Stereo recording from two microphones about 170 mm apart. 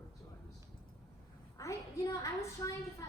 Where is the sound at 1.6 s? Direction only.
20° left (ahead or behind).